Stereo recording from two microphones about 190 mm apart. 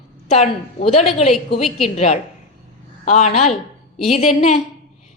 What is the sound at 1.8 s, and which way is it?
A woman's voice, 35° left (ahead or behind).